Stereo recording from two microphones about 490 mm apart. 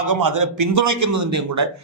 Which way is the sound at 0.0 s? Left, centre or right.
Right.